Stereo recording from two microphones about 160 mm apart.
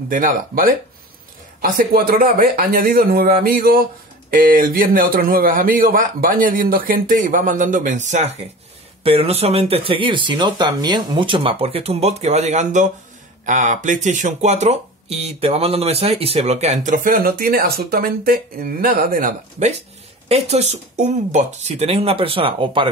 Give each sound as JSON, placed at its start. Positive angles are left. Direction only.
{"t": 0.1, "sound": "a man's voice", "side_deg": -60}
{"t": 9.0, "sound": "speech", "side_deg": -35}
{"t": 20.2, "sound": "speech", "side_deg": -40}